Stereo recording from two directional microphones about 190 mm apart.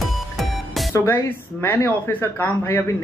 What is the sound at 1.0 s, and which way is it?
Speech, 10° left (ahead or behind).